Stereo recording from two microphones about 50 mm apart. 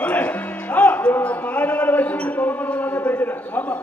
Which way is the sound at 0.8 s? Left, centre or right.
Left.